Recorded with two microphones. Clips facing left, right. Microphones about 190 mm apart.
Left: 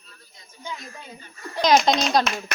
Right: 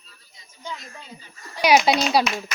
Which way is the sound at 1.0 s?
55° left (ahead or behind).